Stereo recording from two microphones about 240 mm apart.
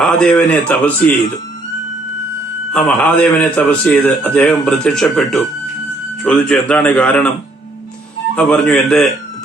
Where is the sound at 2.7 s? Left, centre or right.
Centre.